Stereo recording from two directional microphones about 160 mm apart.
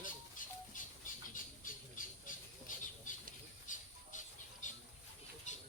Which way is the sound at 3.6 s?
55° left (ahead or behind).